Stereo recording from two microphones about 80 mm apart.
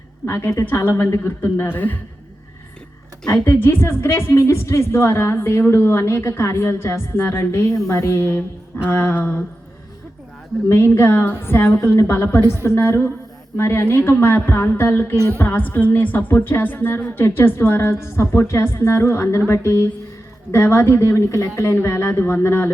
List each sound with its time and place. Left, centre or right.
0.3 s speech: left
3.4 s speech: left
10.9 s speech: left
15.1 s music: right
15.4 s speech: left